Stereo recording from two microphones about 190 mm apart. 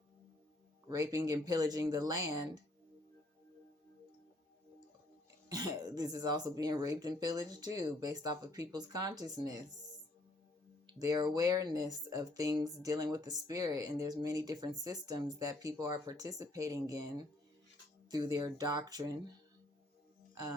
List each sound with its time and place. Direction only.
0.9 s speech: 20° right (ahead or behind)
5.5 s speech: 20° right (ahead or behind)
11.0 s speech: 20° right (ahead or behind)